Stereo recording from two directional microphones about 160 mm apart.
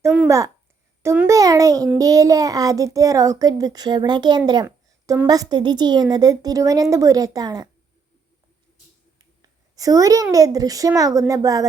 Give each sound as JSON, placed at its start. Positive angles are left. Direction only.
{"t": 0.3, "sound": "a child's voice", "side_deg": -20}
{"t": 1.0, "sound": "a sound", "side_deg": -10}
{"t": 1.3, "sound": "a child's voice", "side_deg": -20}
{"t": 9.7, "sound": "a child's voice", "side_deg": -20}